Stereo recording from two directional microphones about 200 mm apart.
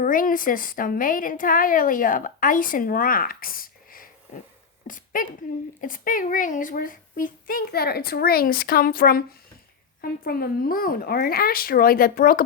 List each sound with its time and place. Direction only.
0.0 s a woman's voice: 45° left (ahead or behind)